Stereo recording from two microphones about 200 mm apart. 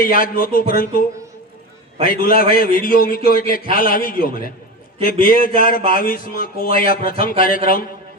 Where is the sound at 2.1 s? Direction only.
45° left (ahead or behind).